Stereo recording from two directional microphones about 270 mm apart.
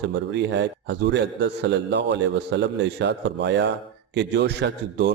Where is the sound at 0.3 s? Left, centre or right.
Right.